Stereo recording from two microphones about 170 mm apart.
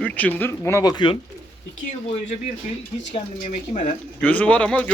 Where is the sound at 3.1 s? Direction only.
45° left (ahead or behind).